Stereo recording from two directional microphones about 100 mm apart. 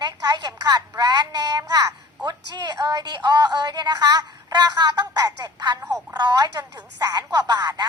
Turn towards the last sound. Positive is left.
turn(degrees=-45)  # may be behind; listen again after turning